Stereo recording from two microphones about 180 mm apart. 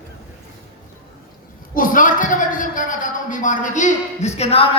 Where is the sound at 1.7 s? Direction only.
50° left (ahead or behind).